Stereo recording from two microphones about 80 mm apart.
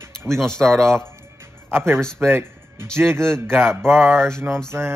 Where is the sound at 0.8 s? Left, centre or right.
Right.